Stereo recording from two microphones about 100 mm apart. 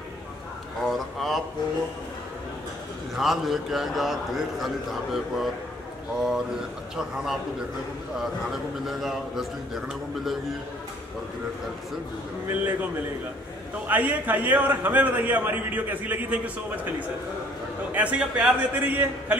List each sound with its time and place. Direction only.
0.8 s a sound: centre (ahead or behind)
3.2 s a man's voice: centre (ahead or behind)
8.8 s a man's voice: centre (ahead or behind)
12.4 s a man's voice: 20° right (ahead or behind)
13.8 s a man's voice: 15° right (ahead or behind)
17.9 s a man's voice: 15° right (ahead or behind)